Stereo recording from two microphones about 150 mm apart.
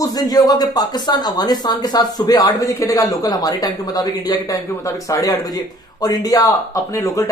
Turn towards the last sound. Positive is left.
turn(degrees=20)  # may be behind; listen again after turning